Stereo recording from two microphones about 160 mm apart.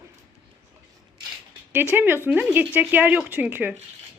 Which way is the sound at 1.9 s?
15° right (ahead or behind).